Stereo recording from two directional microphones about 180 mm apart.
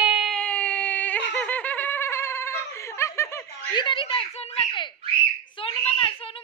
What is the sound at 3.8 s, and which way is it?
A woman's voice, 30° left (ahead or behind).